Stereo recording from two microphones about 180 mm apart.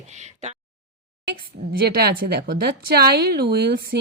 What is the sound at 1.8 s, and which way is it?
Speech, 60° right (ahead or behind).